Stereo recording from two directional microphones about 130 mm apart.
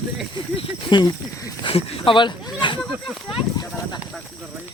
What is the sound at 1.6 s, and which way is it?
Speech, 45° left (ahead or behind).